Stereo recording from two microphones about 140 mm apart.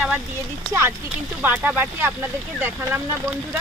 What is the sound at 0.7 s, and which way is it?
Speech, 20° right (ahead or behind).